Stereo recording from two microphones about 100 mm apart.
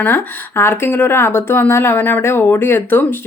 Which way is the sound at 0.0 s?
20° left (ahead or behind).